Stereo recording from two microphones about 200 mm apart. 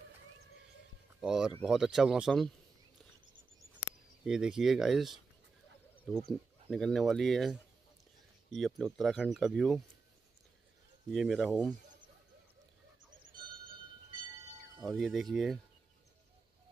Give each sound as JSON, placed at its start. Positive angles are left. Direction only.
{"t": 1.2, "sound": "speech", "side_deg": -5}
{"t": 4.2, "sound": "speech", "side_deg": -5}
{"t": 8.5, "sound": "speech", "side_deg": 0}
{"t": 11.1, "sound": "speech", "side_deg": 0}
{"t": 13.4, "sound": "a sound", "side_deg": -45}
{"t": 14.8, "sound": "speech", "side_deg": -5}